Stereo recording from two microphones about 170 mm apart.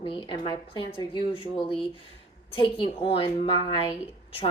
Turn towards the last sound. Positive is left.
turn(degrees=30)  # may be behind; listen again after turning